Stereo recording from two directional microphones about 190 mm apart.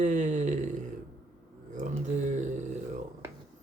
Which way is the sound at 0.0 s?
40° right (ahead or behind).